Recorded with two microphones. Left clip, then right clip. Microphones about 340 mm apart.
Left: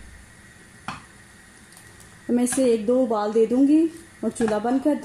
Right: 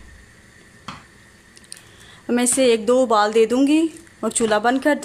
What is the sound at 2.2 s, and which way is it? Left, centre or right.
Speech, right.